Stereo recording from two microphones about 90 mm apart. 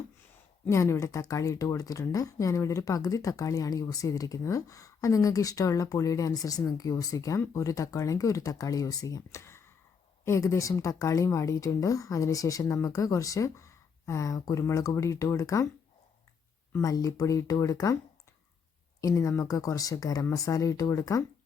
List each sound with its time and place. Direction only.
0.7 s speech: 35° left (ahead or behind)
16.7 s speech: 40° left (ahead or behind)
19.0 s speech: 40° left (ahead or behind)